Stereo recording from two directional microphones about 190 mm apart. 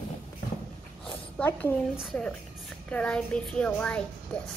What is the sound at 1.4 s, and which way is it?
A child's voice, 10° left (ahead or behind).